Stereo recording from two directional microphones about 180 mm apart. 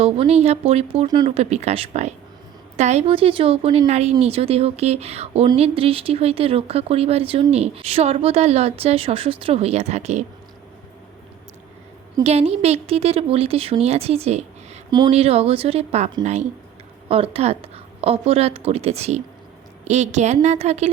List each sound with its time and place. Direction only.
0.0 s speech: 35° right (ahead or behind)
1.0 s speech: 25° right (ahead or behind)
1.3 s speech: 35° right (ahead or behind)
12.2 s speech: 35° right (ahead or behind)
14.8 s speech: 25° right (ahead or behind)
15.1 s speech: 35° right (ahead or behind)